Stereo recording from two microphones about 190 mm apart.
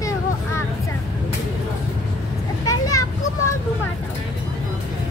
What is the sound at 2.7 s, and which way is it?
Children playing, 15° left (ahead or behind).